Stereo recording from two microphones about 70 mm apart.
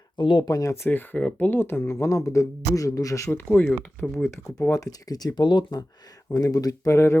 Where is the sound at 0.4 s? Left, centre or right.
Left.